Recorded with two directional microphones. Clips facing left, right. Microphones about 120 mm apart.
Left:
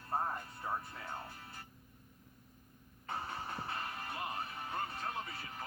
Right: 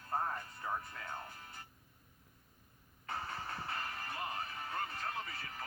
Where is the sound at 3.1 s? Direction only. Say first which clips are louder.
Left 1 dB; 20° left (ahead or behind).